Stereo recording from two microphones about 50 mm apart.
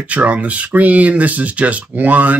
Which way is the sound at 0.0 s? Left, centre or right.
Right.